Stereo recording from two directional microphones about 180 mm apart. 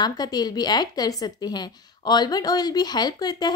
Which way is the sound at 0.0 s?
20° left (ahead or behind).